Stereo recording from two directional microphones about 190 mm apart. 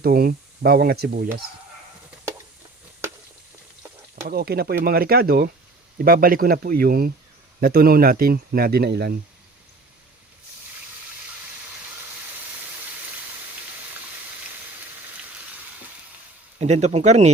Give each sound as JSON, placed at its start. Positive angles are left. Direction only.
{"t": 0.0, "sound": "speech", "side_deg": -50}
{"t": 4.3, "sound": "speech", "side_deg": -55}
{"t": 16.6, "sound": "speech", "side_deg": -35}